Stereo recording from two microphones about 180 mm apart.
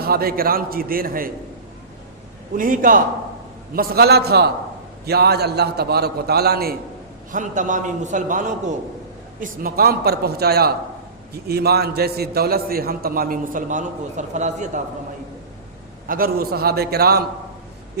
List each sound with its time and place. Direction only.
0.0 s a man's voice: 55° right (ahead or behind)
2.6 s a man's voice: 50° right (ahead or behind)
3.8 s a man's voice: 60° right (ahead or behind)
7.3 s a man's voice: 45° right (ahead or behind)
9.4 s a man's voice: 55° right (ahead or behind)
16.0 s a man's voice: 55° right (ahead or behind)